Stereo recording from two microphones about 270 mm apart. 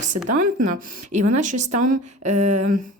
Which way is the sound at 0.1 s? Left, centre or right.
Right.